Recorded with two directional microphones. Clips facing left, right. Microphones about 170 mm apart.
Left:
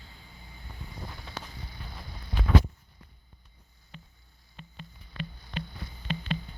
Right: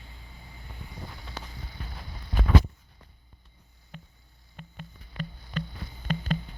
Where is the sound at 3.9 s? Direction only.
50° right (ahead or behind).